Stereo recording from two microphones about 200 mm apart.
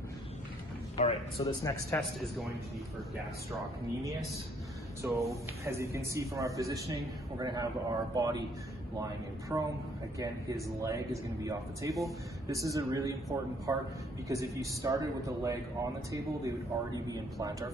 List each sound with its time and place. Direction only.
0.9 s a man's voice: 30° left (ahead or behind)
1.6 s a man's voice: 15° left (ahead or behind)
5.0 s a man's voice: 10° right (ahead or behind)
9.5 s a man's voice: 15° right (ahead or behind)